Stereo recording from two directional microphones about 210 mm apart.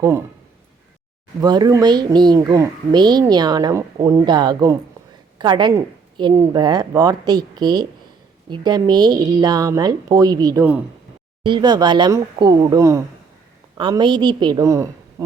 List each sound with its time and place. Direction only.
1.4 s a child's voice: 20° right (ahead or behind)
11.4 s a child's voice: 20° right (ahead or behind)